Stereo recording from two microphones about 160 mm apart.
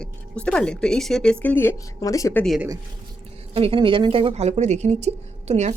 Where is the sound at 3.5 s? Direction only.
35° right (ahead or behind).